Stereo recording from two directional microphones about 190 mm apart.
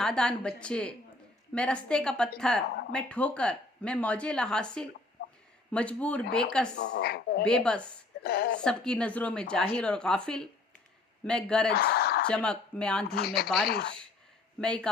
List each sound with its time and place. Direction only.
0.0 s speech: 5° left (ahead or behind)
5.2 s chicken: 55° left (ahead or behind)
5.7 s speech: 5° left (ahead or behind)
6.7 s a woman's voice: 65° left (ahead or behind)
7.4 s speech: 5° left (ahead or behind)
8.2 s a woman's voice: 55° left (ahead or behind)
8.6 s speech: 5° left (ahead or behind)
11.7 s a sound: 55° left (ahead or behind)
12.3 s speech: 5° left (ahead or behind)
13.1 s a woman's voice: 55° left (ahead or behind)
14.6 s speech: 5° left (ahead or behind)